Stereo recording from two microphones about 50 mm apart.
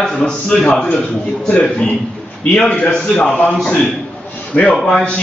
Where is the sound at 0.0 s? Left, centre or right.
Centre.